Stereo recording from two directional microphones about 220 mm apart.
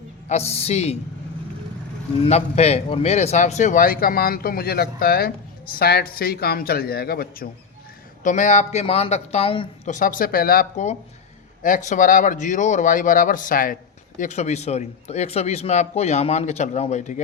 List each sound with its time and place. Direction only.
0.3 s a woman's voice: 30° left (ahead or behind)
2.2 s a man's voice: 30° left (ahead or behind)